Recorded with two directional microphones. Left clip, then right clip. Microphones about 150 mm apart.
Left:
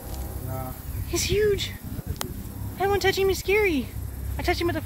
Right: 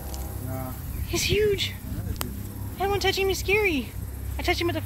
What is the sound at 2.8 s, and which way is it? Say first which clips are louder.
Speech: left 2 dB; 30° left (ahead or behind).